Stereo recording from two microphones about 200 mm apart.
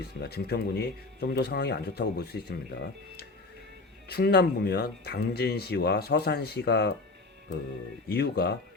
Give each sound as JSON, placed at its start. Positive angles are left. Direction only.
{"t": 0.2, "sound": "speech", "side_deg": 50}
{"t": 4.1, "sound": "speech", "side_deg": 55}
{"t": 8.1, "sound": "speech", "side_deg": 55}